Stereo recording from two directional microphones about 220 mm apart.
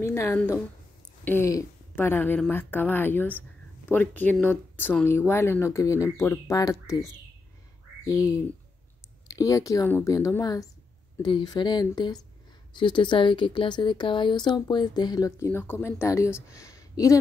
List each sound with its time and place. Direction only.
0.0 s speech: 10° left (ahead or behind)